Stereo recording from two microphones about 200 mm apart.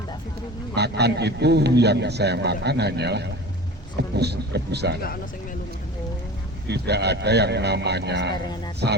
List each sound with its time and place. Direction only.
0.8 s a man's voice: 55° right (ahead or behind)
6.7 s a man's voice: 55° right (ahead or behind)